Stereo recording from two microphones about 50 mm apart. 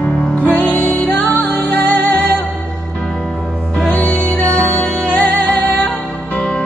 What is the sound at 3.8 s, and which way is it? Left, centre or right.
Music, left.